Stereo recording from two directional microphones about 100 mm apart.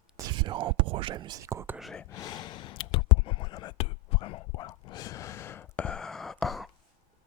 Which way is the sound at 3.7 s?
80° left.